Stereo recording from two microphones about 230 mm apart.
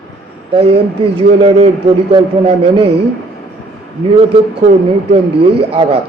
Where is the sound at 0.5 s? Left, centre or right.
Right.